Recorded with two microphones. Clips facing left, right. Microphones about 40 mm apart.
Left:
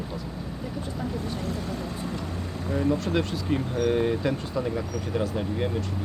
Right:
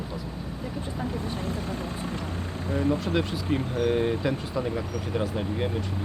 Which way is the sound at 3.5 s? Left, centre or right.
Right.